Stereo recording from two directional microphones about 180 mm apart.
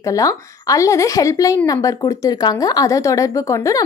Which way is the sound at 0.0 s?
20° left (ahead or behind).